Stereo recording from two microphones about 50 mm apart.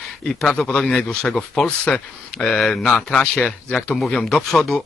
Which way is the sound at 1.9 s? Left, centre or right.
Left.